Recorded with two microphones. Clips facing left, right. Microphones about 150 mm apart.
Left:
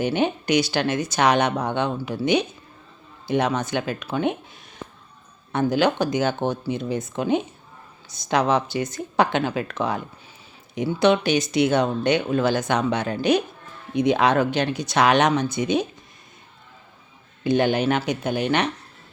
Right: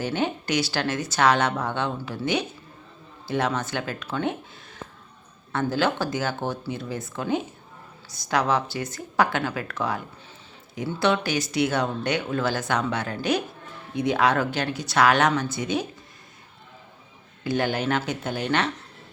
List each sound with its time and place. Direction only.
0.0 s speech: 20° left (ahead or behind)
17.4 s speech: 20° left (ahead or behind)